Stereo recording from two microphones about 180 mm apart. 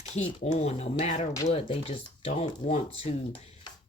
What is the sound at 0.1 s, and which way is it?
Speech, 30° left (ahead or behind).